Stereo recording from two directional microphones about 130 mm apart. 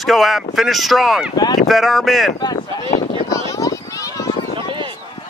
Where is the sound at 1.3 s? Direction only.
30° left (ahead or behind).